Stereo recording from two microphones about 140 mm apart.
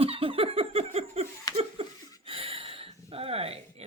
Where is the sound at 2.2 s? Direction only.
40° right (ahead or behind).